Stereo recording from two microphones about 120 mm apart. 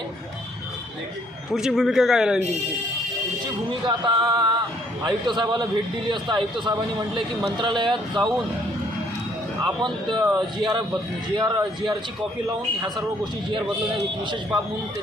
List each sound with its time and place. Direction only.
1.5 s a man's voice: 5° right (ahead or behind)
3.8 s a man's voice: 40° right (ahead or behind)
9.6 s a man's voice: 40° right (ahead or behind)